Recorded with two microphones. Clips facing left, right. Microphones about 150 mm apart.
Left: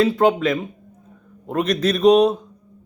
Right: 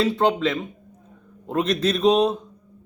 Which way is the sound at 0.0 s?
10° left (ahead or behind).